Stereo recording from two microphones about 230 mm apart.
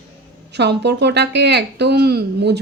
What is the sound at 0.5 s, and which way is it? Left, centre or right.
A woman's voice, right.